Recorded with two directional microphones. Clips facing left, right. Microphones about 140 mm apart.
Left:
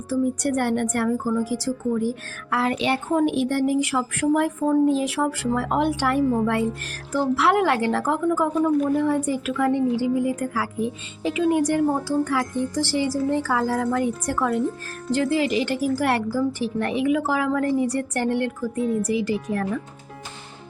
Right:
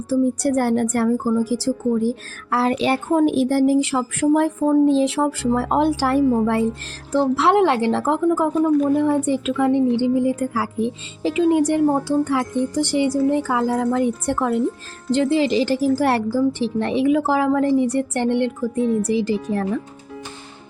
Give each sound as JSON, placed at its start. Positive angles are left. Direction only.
{"t": 0.1, "sound": "a woman's voice", "side_deg": -35}